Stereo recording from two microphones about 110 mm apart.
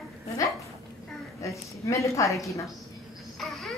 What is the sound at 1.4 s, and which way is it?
A woman's voice, 30° left (ahead or behind).